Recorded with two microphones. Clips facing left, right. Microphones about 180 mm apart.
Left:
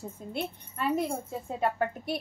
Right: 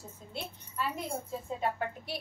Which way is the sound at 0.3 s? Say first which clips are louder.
Left 7 dB; 55° left (ahead or behind).